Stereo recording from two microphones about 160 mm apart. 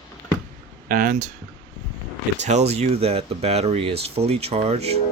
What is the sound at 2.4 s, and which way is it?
Speech, 45° right (ahead or behind).